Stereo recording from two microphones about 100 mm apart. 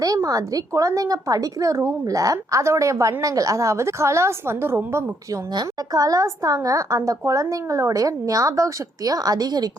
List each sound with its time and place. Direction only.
0.0 s a woman's voice: 35° right (ahead or behind)
5.5 s a woman's voice: 40° right (ahead or behind)